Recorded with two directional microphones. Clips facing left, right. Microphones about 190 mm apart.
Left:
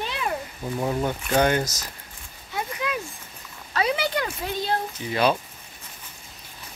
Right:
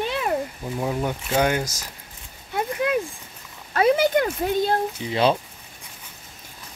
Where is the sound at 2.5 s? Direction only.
50° right (ahead or behind).